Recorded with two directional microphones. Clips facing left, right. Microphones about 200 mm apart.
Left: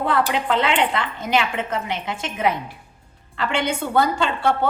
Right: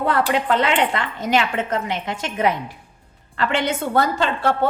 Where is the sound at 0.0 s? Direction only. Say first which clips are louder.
Right 1 dB; 45° right (ahead or behind).